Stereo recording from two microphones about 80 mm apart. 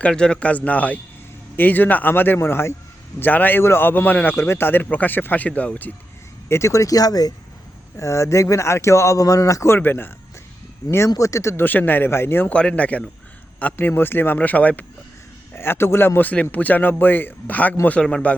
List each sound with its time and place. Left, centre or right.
0.0 s a man's voice: centre
6.5 s speech: left
7.9 s speech: left
11.1 s speech: left
11.5 s a man's voice: left
12.5 s a man's voice: centre
15.5 s a man's voice: left; by 18.3 s centre